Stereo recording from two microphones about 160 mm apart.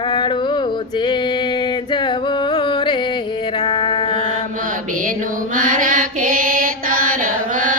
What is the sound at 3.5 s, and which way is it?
Mantra, 30° left (ahead or behind).